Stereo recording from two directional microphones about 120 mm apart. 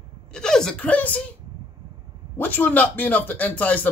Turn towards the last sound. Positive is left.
turn(degrees=15)  # may be behind; listen again after turning